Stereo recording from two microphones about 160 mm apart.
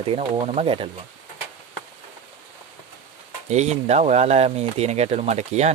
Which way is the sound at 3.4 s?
45° right (ahead or behind).